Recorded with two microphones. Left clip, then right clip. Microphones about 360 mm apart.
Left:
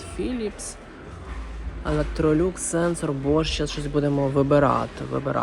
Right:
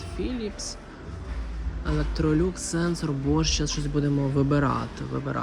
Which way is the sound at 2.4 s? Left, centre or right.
Centre.